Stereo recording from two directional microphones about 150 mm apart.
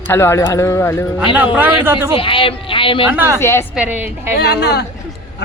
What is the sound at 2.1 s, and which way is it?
Speech, 35° left (ahead or behind).